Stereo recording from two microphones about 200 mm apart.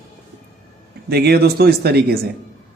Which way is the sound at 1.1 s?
50° right (ahead or behind).